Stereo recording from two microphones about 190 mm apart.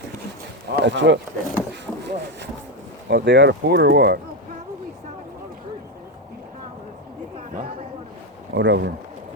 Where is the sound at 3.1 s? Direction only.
65° right (ahead or behind).